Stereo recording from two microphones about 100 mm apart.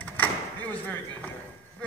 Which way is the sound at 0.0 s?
15° left (ahead or behind).